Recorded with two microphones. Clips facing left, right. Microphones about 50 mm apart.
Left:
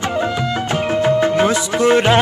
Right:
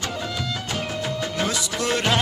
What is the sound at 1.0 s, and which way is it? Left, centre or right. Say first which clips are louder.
Music: left 15 dB; left.